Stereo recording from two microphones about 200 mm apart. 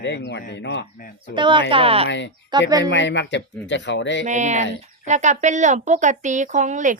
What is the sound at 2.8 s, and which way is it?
Speech, 65° left (ahead or behind).